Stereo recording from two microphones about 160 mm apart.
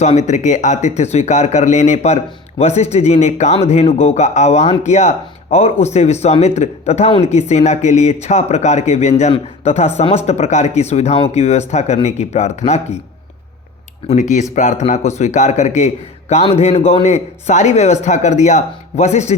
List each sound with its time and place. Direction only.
0.0 s speech: 45° left (ahead or behind)
14.1 s speech: 50° left (ahead or behind)